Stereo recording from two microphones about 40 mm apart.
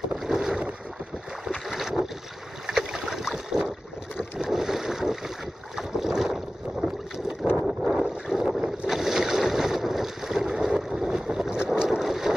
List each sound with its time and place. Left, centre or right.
0.2 s boat: centre
8.0 s boat: centre
12.0 s boat: centre